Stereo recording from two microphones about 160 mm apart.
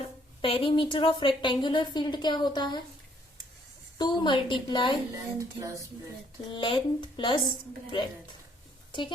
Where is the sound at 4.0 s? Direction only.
30° left (ahead or behind).